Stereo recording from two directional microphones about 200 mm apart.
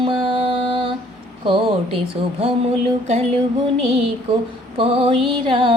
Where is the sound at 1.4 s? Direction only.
25° right (ahead or behind).